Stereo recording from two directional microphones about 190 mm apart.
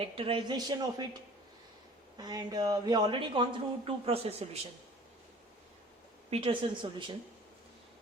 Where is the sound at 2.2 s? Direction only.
20° right (ahead or behind).